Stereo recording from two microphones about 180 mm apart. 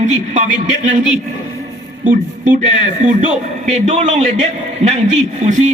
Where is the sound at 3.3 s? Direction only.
40° right (ahead or behind).